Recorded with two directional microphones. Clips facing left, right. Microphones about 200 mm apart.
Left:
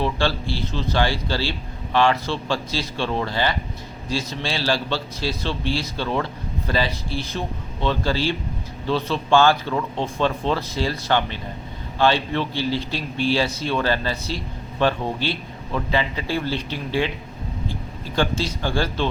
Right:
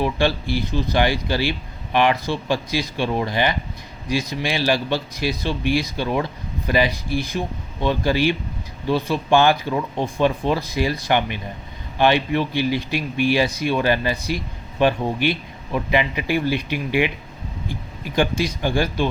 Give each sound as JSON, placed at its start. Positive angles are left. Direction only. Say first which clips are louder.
{"t": 0.0, "sound": "speech", "louder": "right 2 dB", "side_deg": -15}